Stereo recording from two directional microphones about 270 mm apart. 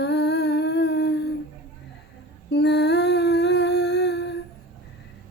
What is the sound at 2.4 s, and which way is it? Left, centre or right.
Humming, left.